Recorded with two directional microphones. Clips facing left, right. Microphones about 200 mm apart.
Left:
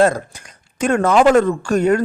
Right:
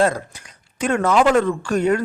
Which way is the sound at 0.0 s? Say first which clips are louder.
Left 4 dB; 45° left (ahead or behind).